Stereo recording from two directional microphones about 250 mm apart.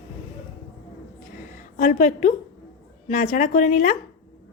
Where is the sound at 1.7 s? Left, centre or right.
Left.